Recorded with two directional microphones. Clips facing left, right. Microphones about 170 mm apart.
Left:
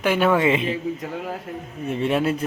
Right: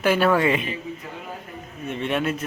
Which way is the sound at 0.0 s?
15° left (ahead or behind).